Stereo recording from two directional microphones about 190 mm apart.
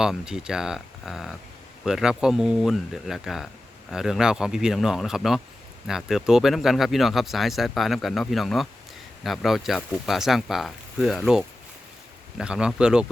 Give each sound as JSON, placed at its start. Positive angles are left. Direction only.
{"t": 0.0, "sound": "speech", "side_deg": -5}